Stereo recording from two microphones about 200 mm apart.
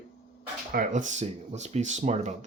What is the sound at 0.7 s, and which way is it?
Speech, 40° right (ahead or behind).